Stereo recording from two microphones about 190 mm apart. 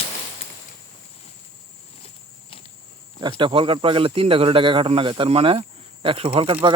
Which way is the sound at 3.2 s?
25° right (ahead or behind).